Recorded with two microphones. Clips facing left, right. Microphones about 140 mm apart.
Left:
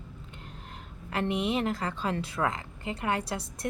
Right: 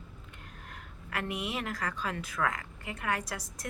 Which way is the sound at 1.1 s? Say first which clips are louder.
Left 7 dB; 25° left (ahead or behind).